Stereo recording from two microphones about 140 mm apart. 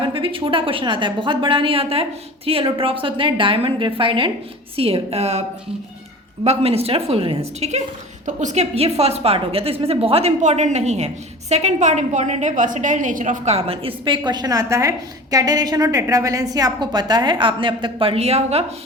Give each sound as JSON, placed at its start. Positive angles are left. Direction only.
{"t": 0.0, "sound": "a woman's voice", "side_deg": -40}
{"t": 8.3, "sound": "a woman's voice", "side_deg": -60}